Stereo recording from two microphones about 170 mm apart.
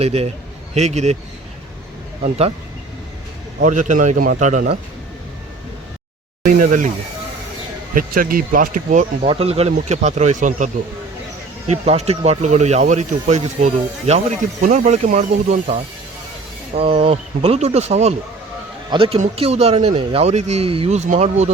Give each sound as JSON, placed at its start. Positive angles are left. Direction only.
{"t": 0.0, "sound": "speech", "side_deg": -35}
{"t": 3.6, "sound": "speech", "side_deg": -45}
{"t": 6.4, "sound": "speech", "side_deg": -50}
{"t": 7.9, "sound": "speech", "side_deg": -55}
{"t": 9.2, "sound": "speech", "side_deg": -35}
{"t": 11.7, "sound": "speech", "side_deg": -40}